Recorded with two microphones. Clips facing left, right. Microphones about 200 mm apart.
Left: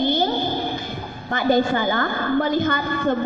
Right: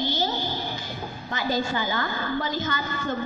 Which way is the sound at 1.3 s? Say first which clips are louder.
Left 8 dB; 55° left (ahead or behind).